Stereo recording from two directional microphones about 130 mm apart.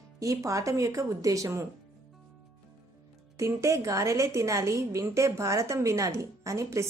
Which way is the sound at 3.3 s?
25° right (ahead or behind).